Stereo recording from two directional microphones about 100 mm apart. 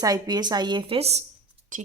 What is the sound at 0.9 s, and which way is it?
Speech, 90° right.